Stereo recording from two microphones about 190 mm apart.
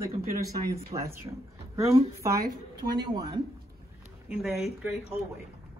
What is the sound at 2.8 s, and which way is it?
Speech, 20° right (ahead or behind).